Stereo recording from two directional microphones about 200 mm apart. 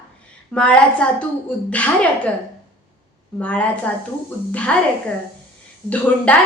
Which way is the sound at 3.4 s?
5° left (ahead or behind).